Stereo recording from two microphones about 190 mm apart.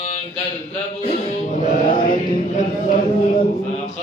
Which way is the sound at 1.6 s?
45° left (ahead or behind).